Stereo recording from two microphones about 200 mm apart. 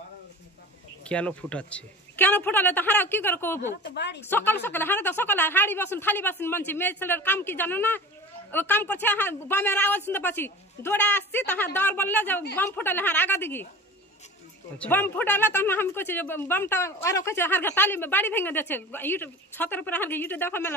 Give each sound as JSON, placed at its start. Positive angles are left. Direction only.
{"t": 1.0, "sound": "a woman's voice", "side_deg": 5}
{"t": 3.8, "sound": "a woman's voice", "side_deg": 60}
{"t": 4.3, "sound": "a woman's voice", "side_deg": 10}
{"t": 14.8, "sound": "a woman's voice", "side_deg": 10}